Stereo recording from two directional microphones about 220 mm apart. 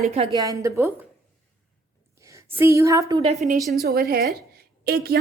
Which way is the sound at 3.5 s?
Centre (ahead or behind).